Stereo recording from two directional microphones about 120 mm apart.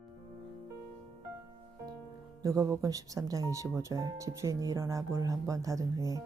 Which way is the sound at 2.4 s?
25° right (ahead or behind).